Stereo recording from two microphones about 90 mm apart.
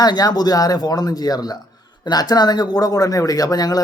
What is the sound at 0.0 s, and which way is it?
Speech, 45° left (ahead or behind).